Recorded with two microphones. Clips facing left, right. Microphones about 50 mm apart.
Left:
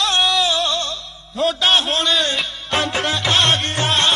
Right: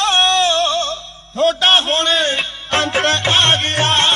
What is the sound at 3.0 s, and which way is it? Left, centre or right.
Music, right.